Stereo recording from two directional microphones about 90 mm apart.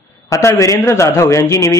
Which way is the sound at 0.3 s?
35° left (ahead or behind).